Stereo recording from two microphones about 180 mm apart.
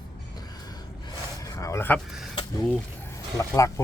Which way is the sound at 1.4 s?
20° left (ahead or behind).